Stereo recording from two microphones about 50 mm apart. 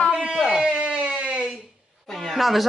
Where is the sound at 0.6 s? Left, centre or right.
Right.